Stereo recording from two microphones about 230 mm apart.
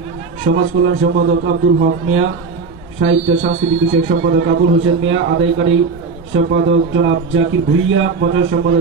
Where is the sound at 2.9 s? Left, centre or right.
Right.